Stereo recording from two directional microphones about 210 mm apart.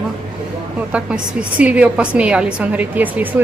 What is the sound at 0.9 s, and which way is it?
A woman's voice, 5° right (ahead or behind).